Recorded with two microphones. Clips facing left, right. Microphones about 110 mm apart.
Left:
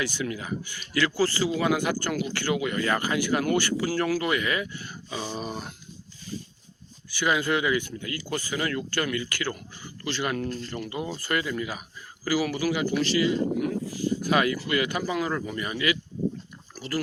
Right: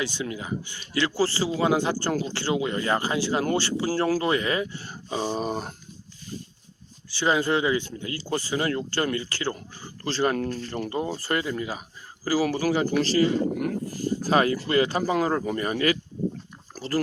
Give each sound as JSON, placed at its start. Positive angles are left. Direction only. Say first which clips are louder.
{"t": 0.0, "sound": "speech", "louder": "even", "side_deg": -25}
{"t": 7.1, "sound": "speech", "louder": "right 2 dB", "side_deg": -30}